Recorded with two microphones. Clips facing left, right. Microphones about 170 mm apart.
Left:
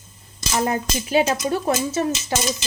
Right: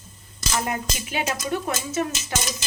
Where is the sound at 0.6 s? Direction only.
35° left (ahead or behind).